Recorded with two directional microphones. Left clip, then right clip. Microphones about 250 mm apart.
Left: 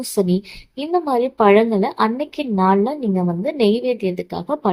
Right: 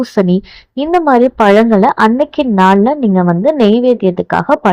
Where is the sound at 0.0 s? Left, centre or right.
Right.